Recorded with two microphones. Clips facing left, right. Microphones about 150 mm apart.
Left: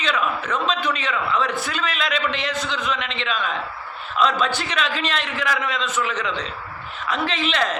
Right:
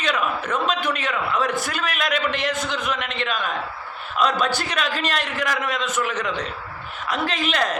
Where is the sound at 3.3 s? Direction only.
10° right (ahead or behind).